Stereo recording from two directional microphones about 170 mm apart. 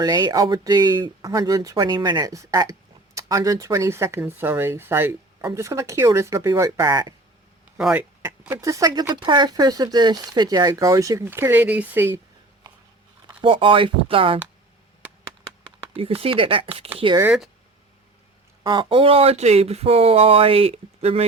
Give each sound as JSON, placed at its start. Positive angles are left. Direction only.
{"t": 0.0, "sound": "speech", "side_deg": -25}
{"t": 7.8, "sound": "speech", "side_deg": -5}
{"t": 8.2, "sound": "speech", "side_deg": -15}
{"t": 13.4, "sound": "speech", "side_deg": -30}
{"t": 16.0, "sound": "speech", "side_deg": -35}
{"t": 18.6, "sound": "speech", "side_deg": -25}